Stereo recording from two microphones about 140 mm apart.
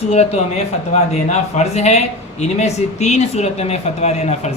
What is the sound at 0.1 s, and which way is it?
Speech, 50° left (ahead or behind).